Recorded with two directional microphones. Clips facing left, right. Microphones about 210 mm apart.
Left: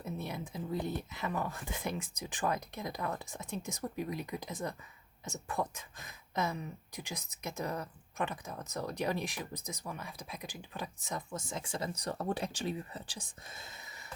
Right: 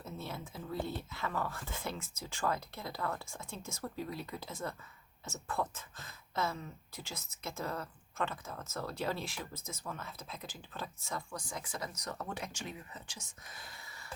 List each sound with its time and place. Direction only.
0.0 s speech: 15° left (ahead or behind)